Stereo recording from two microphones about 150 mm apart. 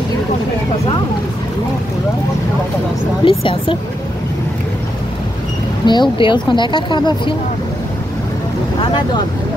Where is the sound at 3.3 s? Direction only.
35° left (ahead or behind).